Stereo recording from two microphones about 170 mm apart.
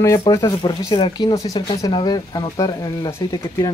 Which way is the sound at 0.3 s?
20° left (ahead or behind).